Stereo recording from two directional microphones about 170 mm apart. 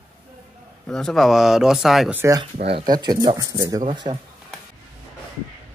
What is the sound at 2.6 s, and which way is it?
Speech, 30° right (ahead or behind).